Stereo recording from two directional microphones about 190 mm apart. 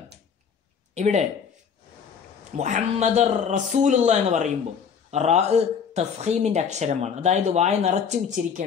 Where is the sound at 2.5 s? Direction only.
40° right (ahead or behind).